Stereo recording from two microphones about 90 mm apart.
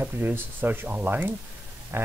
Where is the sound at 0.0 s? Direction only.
20° right (ahead or behind).